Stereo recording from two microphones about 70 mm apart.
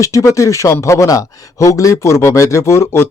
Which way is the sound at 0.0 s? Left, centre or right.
Left.